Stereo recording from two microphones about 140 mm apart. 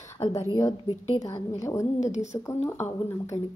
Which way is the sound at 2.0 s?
55° left (ahead or behind).